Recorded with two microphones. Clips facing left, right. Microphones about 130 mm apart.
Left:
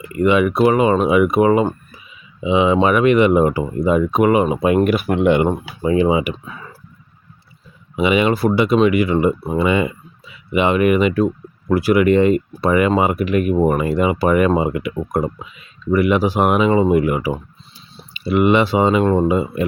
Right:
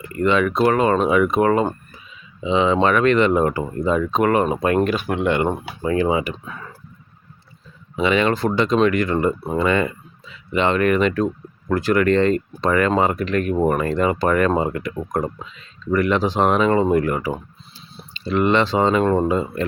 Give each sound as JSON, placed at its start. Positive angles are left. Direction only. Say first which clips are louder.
{"t": 0.1, "sound": "speech", "louder": "left 3 dB", "side_deg": 10}
{"t": 6.3, "sound": "speech", "louder": "even", "side_deg": 5}
{"t": 7.9, "sound": "speech", "louder": "left 2 dB", "side_deg": 10}